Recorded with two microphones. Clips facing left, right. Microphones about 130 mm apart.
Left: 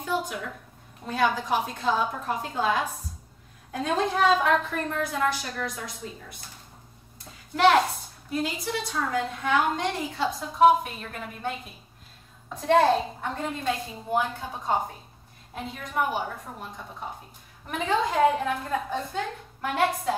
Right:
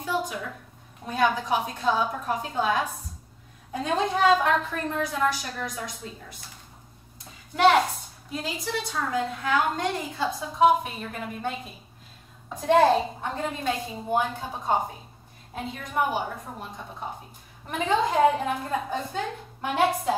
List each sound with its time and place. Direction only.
0.0 s a sound: centre (ahead or behind)
1.0 s a woman's voice: centre (ahead or behind)
7.5 s a woman's voice: centre (ahead or behind)